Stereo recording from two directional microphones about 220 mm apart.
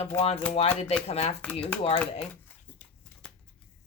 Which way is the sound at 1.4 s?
5° left (ahead or behind).